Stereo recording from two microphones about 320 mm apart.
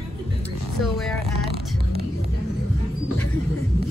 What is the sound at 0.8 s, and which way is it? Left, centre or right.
Speech, centre.